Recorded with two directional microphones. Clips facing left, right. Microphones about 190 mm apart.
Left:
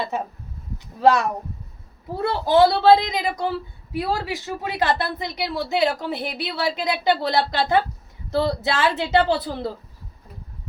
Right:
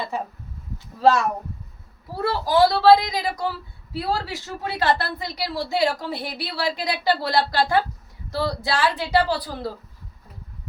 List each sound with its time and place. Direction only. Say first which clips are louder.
2.2 s a woman's voice: left 2 dB; 25° left (ahead or behind)